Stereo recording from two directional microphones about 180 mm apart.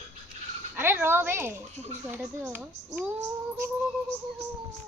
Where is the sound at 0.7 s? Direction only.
10° right (ahead or behind).